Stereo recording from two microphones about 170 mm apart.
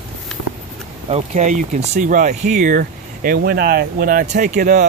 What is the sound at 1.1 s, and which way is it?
Speech, 40° right (ahead or behind).